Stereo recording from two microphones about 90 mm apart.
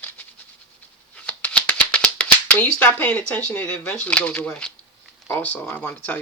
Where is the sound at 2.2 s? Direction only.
15° left (ahead or behind).